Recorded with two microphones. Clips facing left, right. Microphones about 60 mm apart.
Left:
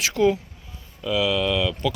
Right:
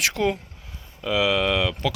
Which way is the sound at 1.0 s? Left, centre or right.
Right.